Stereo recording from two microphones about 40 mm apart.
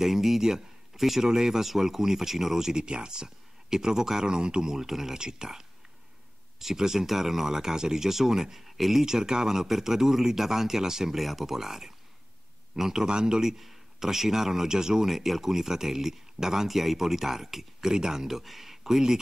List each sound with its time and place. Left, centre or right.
0.0 s speech: centre
2.7 s speech: right
4.7 s speech: centre
13.4 s speech: centre